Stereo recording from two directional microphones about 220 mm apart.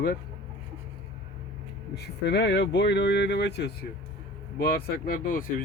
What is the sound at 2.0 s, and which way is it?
Speech, 50° left (ahead or behind).